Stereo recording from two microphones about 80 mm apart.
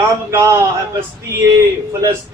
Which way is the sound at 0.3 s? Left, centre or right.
Right.